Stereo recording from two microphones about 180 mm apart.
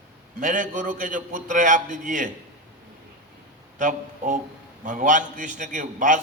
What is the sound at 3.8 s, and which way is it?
A man's voice, 45° right (ahead or behind).